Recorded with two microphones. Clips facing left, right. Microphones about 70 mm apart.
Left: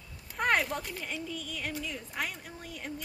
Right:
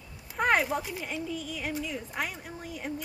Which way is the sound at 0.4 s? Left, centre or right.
Centre.